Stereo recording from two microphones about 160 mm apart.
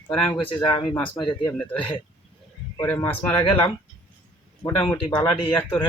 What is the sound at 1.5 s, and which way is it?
Speech, 10° left (ahead or behind).